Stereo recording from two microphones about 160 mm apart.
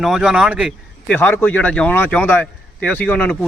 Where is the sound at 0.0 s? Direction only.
5° right (ahead or behind).